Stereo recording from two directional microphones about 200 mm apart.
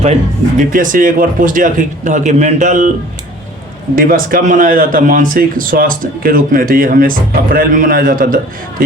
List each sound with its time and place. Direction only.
0.7 s a man's voice: 40° right (ahead or behind)
3.9 s speech: 45° right (ahead or behind)